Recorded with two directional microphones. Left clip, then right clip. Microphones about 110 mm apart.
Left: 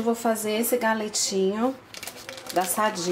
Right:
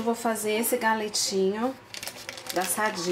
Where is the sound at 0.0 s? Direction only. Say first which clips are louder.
Left 2 dB; 10° left (ahead or behind).